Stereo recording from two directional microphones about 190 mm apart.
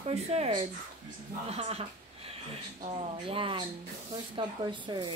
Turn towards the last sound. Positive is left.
turn(degrees=-25)  # may be behind; listen again after turning